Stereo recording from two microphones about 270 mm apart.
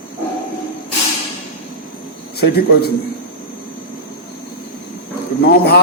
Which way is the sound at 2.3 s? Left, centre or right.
Left.